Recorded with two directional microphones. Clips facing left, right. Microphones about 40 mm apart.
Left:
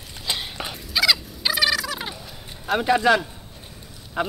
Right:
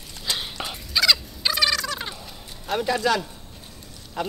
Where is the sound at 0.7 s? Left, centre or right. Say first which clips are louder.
Even; centre.